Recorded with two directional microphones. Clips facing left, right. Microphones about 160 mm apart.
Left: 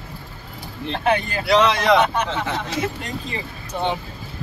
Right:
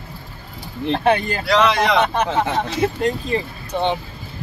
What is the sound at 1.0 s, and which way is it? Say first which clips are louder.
Speech: right 2 dB; 35° right (ahead or behind).